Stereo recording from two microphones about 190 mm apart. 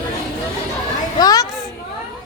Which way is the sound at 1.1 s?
20° left (ahead or behind).